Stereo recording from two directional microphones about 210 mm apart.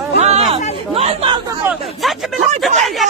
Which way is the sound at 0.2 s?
30° right (ahead or behind).